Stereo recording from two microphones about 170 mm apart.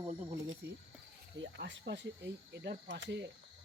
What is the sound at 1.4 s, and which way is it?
Speech, 90° right.